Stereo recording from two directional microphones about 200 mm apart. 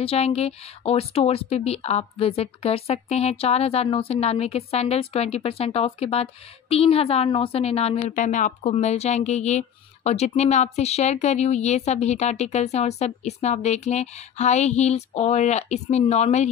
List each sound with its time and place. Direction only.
0.0 s a woman's voice: 30° left (ahead or behind)